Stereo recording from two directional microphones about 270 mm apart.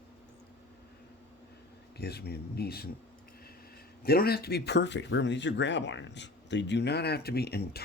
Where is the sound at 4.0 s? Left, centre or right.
Left.